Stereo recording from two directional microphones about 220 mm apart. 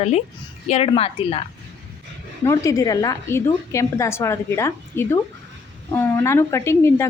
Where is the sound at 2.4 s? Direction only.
15° left (ahead or behind).